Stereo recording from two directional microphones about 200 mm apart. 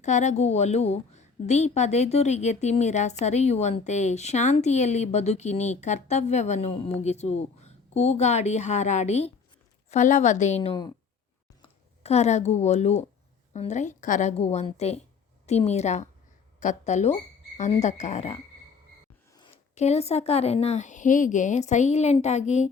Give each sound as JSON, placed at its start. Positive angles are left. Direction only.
{"t": 0.0, "sound": "a woman's voice", "side_deg": 35}
{"t": 12.0, "sound": "a woman's voice", "side_deg": 35}
{"t": 19.7, "sound": "a woman's voice", "side_deg": 35}